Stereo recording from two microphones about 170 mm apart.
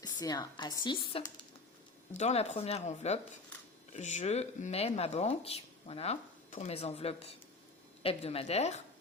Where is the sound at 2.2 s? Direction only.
40° left (ahead or behind).